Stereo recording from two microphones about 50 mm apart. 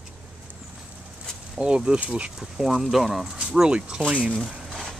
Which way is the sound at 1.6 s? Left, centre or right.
Centre.